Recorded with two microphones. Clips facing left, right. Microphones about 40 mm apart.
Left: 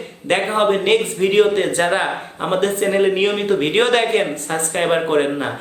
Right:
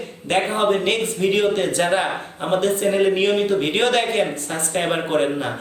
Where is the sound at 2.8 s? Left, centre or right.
Centre.